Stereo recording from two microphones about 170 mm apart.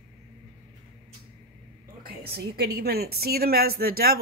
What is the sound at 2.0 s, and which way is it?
A woman's voice, 70° right (ahead or behind).